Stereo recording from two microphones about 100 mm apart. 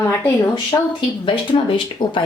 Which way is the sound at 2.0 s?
45° left (ahead or behind).